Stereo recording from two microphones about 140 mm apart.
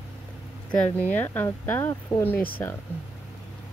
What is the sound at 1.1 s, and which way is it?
Speech, 15° left (ahead or behind).